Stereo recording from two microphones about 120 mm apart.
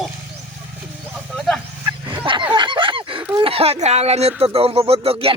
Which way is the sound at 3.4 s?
55° right (ahead or behind).